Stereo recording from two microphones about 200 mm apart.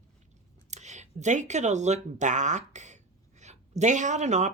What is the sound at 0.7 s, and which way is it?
Speech, 35° right (ahead or behind).